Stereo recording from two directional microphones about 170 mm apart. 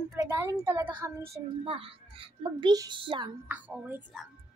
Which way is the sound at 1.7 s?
30° right (ahead or behind).